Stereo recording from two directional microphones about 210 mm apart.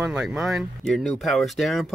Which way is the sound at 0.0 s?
5° right (ahead or behind).